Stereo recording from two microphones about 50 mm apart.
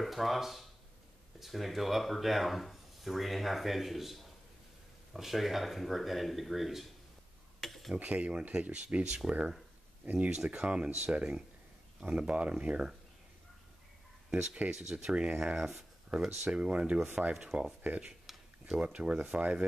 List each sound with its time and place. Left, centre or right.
0.0 s speech: centre
7.6 s a sound: centre
7.9 s speech: right
14.3 s speech: centre
16.4 s speech: centre
18.2 s tick-tock: centre
18.8 s speech: right